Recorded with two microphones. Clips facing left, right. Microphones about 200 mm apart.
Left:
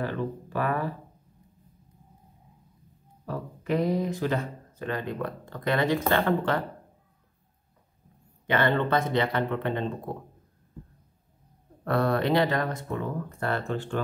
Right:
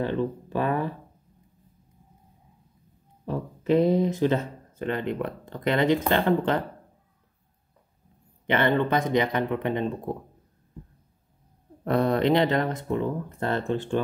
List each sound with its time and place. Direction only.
0.0 s speech: 20° right (ahead or behind)
3.3 s speech: 25° right (ahead or behind)
8.5 s speech: 20° right (ahead or behind)
11.8 s speech: 20° right (ahead or behind)